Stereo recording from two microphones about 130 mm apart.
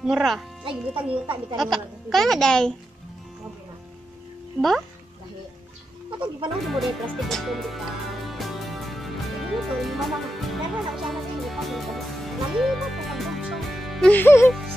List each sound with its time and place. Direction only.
0.0 s a woman's voice: centre (ahead or behind)
1.2 s speech: 35° right (ahead or behind)
1.6 s a woman's voice: centre (ahead or behind)
4.6 s a woman's voice: centre (ahead or behind)
6.0 s speech: 40° right (ahead or behind)
6.7 s music: centre (ahead or behind)
14.1 s speech: 20° left (ahead or behind)